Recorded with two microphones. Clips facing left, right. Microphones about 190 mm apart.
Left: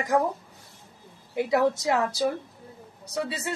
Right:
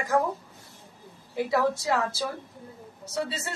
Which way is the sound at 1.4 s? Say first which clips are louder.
Left 2 dB; 20° left (ahead or behind).